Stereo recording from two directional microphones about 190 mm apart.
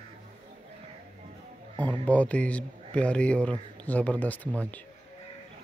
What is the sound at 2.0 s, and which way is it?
Speech, 5° left (ahead or behind).